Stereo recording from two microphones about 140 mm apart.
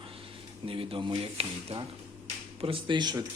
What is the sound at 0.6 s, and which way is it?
Speech, 40° right (ahead or behind).